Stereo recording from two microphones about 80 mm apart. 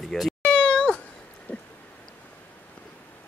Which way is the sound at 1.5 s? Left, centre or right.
Centre.